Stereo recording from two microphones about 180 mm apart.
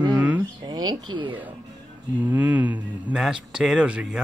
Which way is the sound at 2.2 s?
10° right (ahead or behind).